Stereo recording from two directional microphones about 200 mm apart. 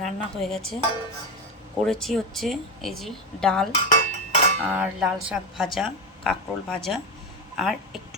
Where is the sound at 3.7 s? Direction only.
30° left (ahead or behind).